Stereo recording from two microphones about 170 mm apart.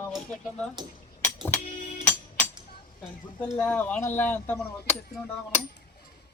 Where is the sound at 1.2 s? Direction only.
10° left (ahead or behind).